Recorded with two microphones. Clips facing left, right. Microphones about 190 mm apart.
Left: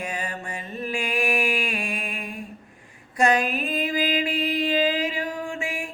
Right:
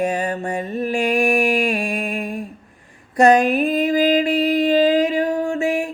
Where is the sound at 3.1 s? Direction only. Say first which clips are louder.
Right 8 dB; 40° right (ahead or behind).